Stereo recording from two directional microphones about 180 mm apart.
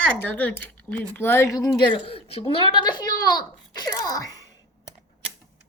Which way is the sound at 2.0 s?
35° left (ahead or behind).